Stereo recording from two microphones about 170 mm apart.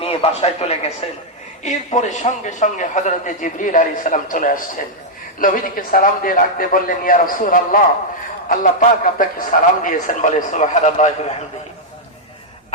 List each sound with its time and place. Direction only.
0.0 s a man's voice: 35° left (ahead or behind)